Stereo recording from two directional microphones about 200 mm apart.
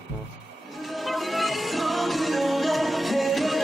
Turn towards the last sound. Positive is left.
turn(degrees=0)  # may be behind; listen again after turning